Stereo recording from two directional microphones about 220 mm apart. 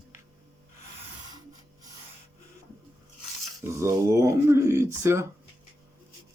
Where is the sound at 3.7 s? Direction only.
10° right (ahead or behind).